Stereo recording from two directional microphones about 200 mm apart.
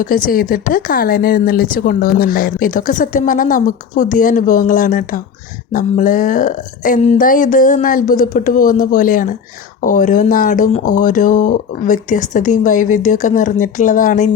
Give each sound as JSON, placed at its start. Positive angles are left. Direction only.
{"t": 0.0, "sound": "speech", "side_deg": 45}